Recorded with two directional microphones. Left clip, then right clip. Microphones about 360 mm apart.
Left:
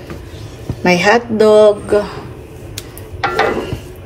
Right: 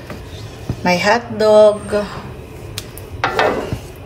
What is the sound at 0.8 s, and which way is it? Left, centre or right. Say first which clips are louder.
A woman's voice: left 3 dB; centre.